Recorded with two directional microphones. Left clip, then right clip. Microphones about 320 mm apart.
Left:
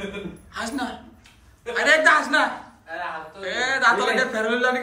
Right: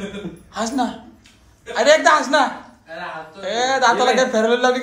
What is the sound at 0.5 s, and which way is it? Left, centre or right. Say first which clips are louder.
A man's voice: right 7 dB; centre.